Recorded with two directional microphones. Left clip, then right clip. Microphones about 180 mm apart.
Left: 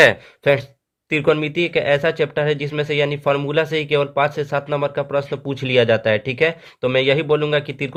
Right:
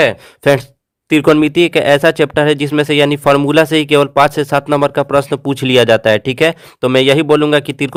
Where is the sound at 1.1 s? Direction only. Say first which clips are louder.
Right 8 dB; 50° right (ahead or behind).